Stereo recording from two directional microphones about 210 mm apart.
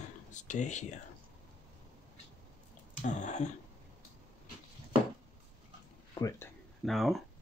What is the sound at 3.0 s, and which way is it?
Speech, 35° left (ahead or behind).